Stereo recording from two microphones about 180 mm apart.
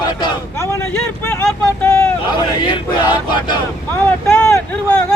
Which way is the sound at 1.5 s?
10° left (ahead or behind).